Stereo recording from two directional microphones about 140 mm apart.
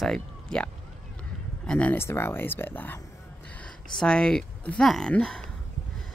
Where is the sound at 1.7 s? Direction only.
10° left (ahead or behind).